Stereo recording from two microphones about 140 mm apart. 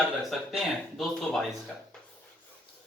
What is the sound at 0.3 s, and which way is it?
A man's voice, centre (ahead or behind).